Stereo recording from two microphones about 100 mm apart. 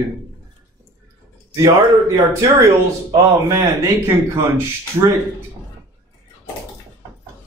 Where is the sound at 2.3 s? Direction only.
30° right (ahead or behind).